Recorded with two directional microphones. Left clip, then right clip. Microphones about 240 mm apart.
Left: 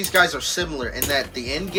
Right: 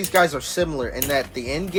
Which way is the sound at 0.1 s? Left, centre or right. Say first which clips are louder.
Even; right.